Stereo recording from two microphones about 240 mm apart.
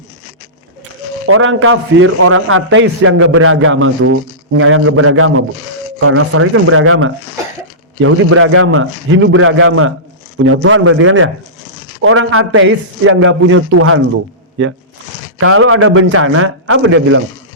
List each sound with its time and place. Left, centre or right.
1.3 s a man's voice: right
15.4 s a man's voice: right